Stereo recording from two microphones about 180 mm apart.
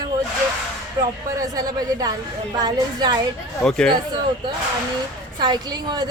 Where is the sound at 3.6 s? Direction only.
5° left (ahead or behind).